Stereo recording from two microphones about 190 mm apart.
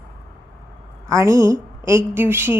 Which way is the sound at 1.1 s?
15° right (ahead or behind).